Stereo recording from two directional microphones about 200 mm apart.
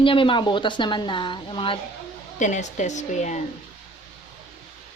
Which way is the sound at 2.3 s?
35° left (ahead or behind).